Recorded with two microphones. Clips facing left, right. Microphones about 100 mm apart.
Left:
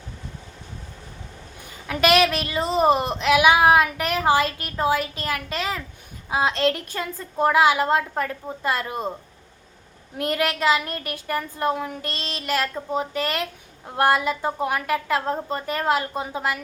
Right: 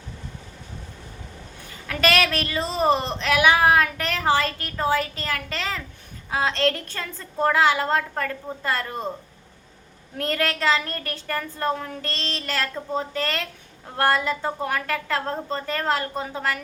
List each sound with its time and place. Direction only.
1.9 s a woman's voice: 15° left (ahead or behind)
10.2 s a woman's voice: 15° left (ahead or behind)